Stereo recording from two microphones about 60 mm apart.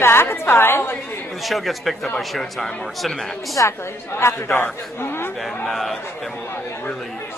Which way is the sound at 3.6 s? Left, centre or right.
Left.